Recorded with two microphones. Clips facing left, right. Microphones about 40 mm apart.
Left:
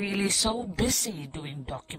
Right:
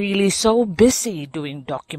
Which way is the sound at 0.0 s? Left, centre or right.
Right.